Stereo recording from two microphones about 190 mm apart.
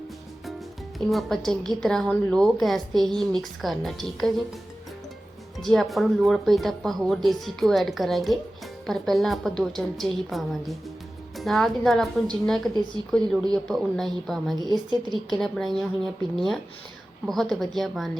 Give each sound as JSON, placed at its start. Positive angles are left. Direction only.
{"t": 0.9, "sound": "a woman's voice", "side_deg": 0}
{"t": 5.6, "sound": "a woman's voice", "side_deg": 0}
{"t": 14.5, "sound": "a woman's voice", "side_deg": -20}
{"t": 15.1, "sound": "a woman's voice", "side_deg": 0}
{"t": 17.2, "sound": "a woman's voice", "side_deg": 0}